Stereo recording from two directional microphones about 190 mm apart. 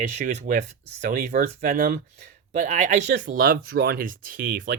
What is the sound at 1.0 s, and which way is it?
Speech, 45° right (ahead or behind).